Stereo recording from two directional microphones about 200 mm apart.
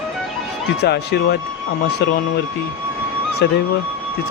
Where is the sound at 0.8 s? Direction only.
55° left (ahead or behind).